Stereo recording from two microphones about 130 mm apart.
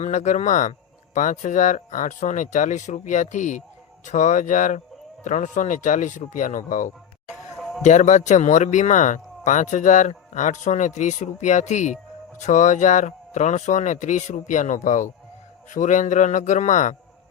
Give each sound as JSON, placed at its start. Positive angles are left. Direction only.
{"t": 0.0, "sound": "speech", "side_deg": 65}
{"t": 7.8, "sound": "speech", "side_deg": 70}